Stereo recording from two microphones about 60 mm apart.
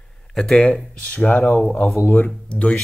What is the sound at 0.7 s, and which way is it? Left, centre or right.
Speech, centre.